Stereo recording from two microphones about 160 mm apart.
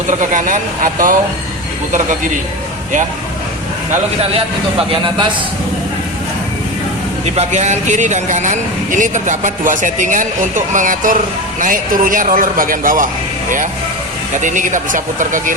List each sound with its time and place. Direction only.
0.1 s speech: 55° right (ahead or behind)
4.8 s a man's voice: 30° right (ahead or behind)
7.3 s speech: 45° right (ahead or behind); by 13.1 s 60° right (ahead or behind)
14.3 s speech: 50° right (ahead or behind)